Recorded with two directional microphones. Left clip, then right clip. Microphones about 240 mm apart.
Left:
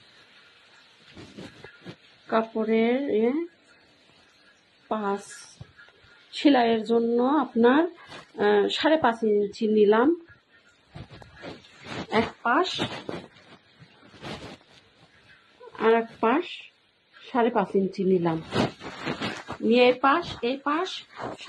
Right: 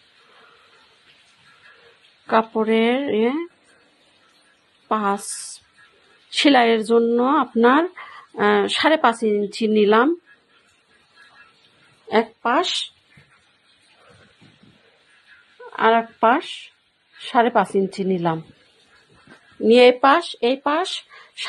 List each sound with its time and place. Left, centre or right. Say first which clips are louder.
2.5 s speech: right 5 dB; right
4.8 s speech: right 7 dB; right
6.3 s speech: right 6 dB; right
12.1 s speech: right 5 dB; right
15.7 s a woman's voice: right 5 dB; right
19.7 s speech: right 7 dB; right